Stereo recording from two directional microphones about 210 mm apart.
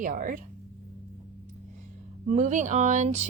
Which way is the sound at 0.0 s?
40° right (ahead or behind).